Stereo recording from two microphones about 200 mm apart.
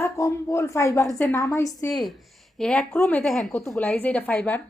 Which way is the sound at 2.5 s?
5° left (ahead or behind).